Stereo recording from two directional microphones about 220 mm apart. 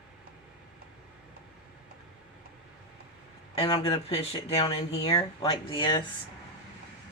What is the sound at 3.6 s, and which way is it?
Speech, 25° left (ahead or behind).